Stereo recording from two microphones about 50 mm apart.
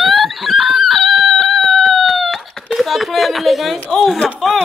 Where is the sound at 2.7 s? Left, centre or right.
Centre.